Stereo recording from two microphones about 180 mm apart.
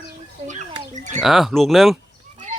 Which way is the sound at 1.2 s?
Centre (ahead or behind).